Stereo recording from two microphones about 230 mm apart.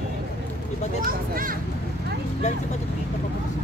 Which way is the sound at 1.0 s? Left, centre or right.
Right.